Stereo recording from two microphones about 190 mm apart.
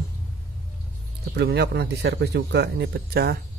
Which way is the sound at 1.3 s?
60° right (ahead or behind).